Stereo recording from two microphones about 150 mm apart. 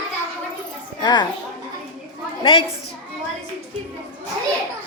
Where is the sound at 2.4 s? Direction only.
35° left (ahead or behind).